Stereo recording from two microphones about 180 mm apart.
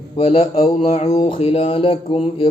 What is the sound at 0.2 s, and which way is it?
Speech, 30° left (ahead or behind).